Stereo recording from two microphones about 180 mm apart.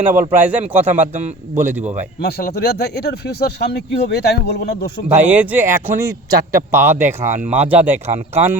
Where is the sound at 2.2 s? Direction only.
60° left (ahead or behind).